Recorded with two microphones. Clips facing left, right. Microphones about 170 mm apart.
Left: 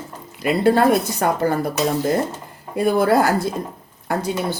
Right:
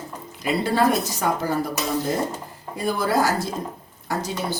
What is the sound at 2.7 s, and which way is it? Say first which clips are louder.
A woman's voice: left 6 dB; 60° left (ahead or behind).